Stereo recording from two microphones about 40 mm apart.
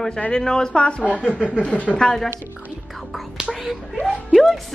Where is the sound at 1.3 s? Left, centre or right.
Right.